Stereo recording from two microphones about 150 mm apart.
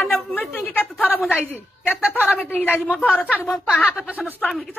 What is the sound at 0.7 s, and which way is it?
Speech, 10° left (ahead or behind).